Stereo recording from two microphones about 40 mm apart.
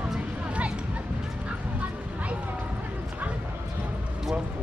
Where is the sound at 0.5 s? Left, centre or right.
Right.